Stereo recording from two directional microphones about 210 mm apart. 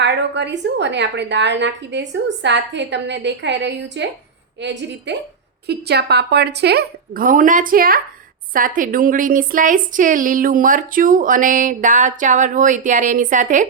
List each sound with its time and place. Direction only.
0.0 s a woman's voice: 55° right (ahead or behind); by 13.7 s 35° right (ahead or behind)